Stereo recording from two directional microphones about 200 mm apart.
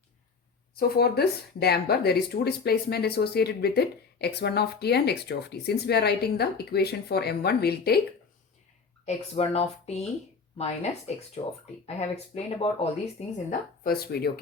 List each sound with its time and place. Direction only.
0.8 s speech: 50° left (ahead or behind)
9.0 s speech: 30° left (ahead or behind)
13.8 s speech: 50° left (ahead or behind)